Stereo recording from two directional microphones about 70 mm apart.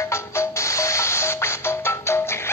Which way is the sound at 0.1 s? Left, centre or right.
Left.